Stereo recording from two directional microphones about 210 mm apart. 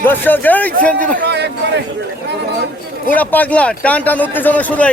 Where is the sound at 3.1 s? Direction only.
10° left (ahead or behind).